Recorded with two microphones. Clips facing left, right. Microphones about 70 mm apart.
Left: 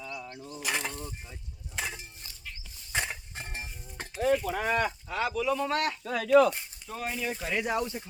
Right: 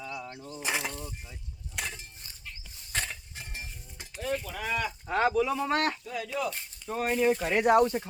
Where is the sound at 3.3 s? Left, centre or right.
Left.